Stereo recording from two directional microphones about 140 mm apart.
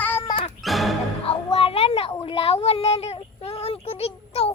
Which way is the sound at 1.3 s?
45° left (ahead or behind).